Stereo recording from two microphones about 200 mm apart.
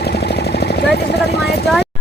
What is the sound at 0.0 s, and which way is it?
Vehicle, 55° left (ahead or behind).